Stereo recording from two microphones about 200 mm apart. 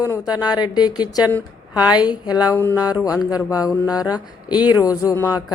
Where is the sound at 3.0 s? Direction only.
5° right (ahead or behind).